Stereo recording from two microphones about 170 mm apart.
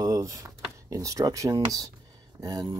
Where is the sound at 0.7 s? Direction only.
20° right (ahead or behind).